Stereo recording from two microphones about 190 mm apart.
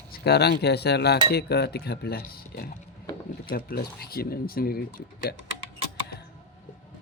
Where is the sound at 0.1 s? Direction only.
60° left (ahead or behind).